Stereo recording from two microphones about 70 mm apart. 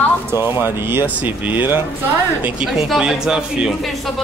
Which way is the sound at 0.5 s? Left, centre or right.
Right.